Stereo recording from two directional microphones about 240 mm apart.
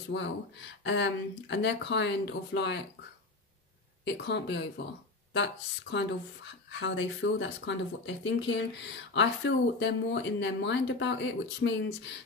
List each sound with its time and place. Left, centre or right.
0.1 s speech: left
4.0 s speech: left